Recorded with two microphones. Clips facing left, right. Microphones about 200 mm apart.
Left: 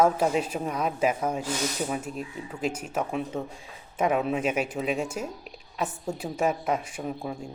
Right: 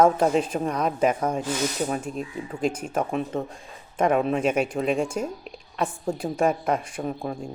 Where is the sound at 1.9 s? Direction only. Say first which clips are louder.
Right 3 dB; 5° left (ahead or behind).